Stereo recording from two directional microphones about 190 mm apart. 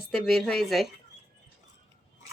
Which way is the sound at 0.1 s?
Centre (ahead or behind).